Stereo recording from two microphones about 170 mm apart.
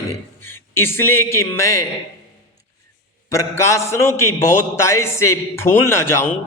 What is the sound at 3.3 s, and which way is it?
A man's voice, 15° left (ahead or behind).